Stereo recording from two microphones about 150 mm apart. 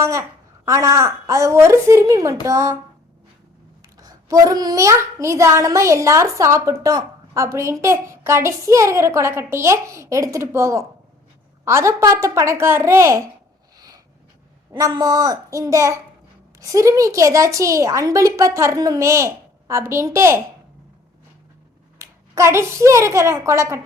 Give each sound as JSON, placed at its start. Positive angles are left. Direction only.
{"t": 0.0, "sound": "a child's voice", "side_deg": -20}
{"t": 3.9, "sound": "a child's voice", "side_deg": -25}
{"t": 13.7, "sound": "a sound", "side_deg": -25}
{"t": 14.7, "sound": "a child's voice", "side_deg": -25}
{"t": 21.9, "sound": "a woman's voice", "side_deg": -20}